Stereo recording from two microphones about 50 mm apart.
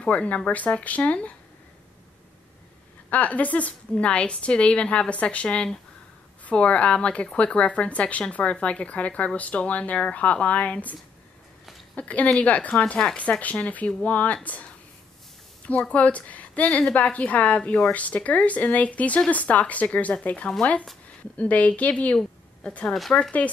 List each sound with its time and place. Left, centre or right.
0.0 s speech: left
3.1 s speech: left
12.0 s a woman's voice: left